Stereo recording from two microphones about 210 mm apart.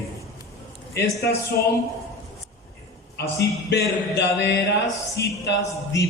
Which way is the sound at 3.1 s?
50° left (ahead or behind).